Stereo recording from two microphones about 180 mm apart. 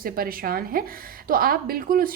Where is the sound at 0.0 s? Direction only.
55° right (ahead or behind).